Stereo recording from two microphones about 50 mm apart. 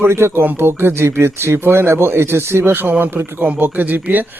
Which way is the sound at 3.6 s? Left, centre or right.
Right.